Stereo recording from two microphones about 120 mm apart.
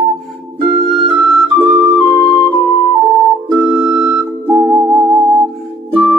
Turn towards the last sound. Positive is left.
turn(degrees=-40)  # may be behind; listen again after turning